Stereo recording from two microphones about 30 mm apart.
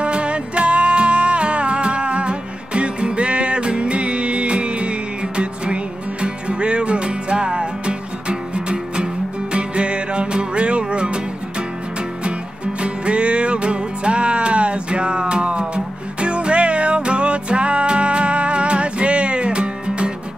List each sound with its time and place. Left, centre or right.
0.0 s music: right
12.8 s music: right